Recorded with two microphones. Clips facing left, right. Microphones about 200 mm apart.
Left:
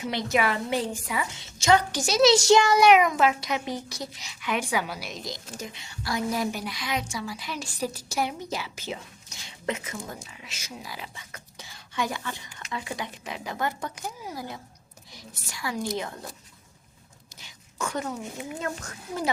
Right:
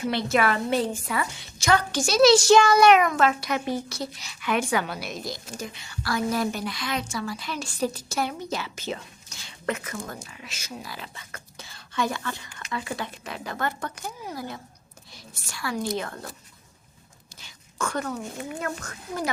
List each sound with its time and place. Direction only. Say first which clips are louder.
0.1 s a woman's voice: right 2 dB; 15° left (ahead or behind)
5.5 s a woman's voice: right 2 dB; 20° left (ahead or behind)
17.4 s a sound: right 2 dB; 20° left (ahead or behind)
18.6 s a child's voice: right 1 dB; 25° left (ahead or behind)